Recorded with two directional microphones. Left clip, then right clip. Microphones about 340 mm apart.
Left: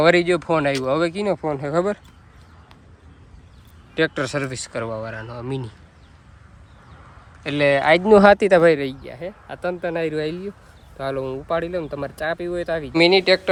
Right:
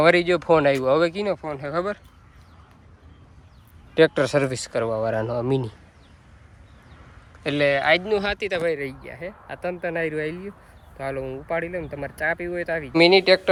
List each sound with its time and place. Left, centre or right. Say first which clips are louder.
0.0 s speech: left 1 dB; centre
3.9 s speech: right 4 dB; centre
7.4 s speech: left 3 dB; centre
8.0 s speech: left 12 dB; left
9.0 s speech: left 2 dB; centre